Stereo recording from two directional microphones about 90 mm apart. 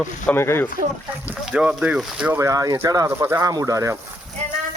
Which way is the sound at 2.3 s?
35° right (ahead or behind).